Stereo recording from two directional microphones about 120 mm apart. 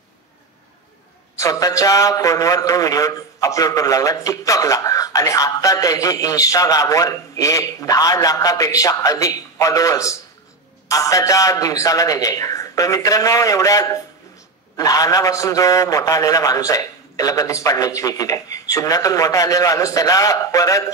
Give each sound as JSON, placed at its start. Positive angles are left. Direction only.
{"t": 1.3, "sound": "a man's voice", "side_deg": 30}